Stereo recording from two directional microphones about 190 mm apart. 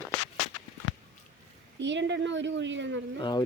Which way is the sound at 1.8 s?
70° right (ahead or behind).